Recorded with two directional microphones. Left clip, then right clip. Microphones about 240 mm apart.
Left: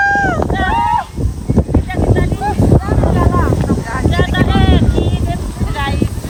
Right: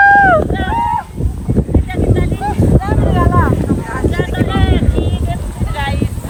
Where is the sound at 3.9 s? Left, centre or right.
Centre.